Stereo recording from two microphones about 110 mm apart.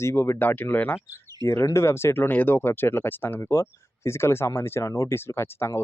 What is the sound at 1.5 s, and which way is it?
Speech, 25° left (ahead or behind).